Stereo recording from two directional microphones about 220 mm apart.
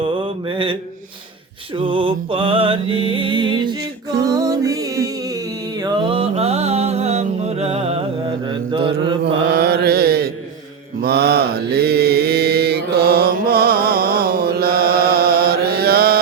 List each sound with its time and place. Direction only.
0.0 s mantra: 25° right (ahead or behind)
1.7 s music: 25° right (ahead or behind)
5.8 s mantra: 20° right (ahead or behind)
9.2 s mantra: 45° right (ahead or behind)